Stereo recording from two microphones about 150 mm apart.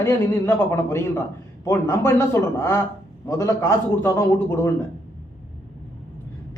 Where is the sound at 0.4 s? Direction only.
15° left (ahead or behind).